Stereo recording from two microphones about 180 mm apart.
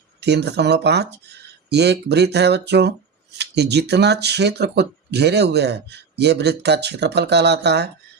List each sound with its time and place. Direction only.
0.2 s speech: 70° right (ahead or behind)